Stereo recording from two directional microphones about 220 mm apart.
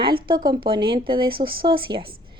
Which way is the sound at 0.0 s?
20° right (ahead or behind).